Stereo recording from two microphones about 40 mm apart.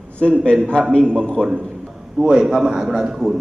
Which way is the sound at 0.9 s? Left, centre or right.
Left.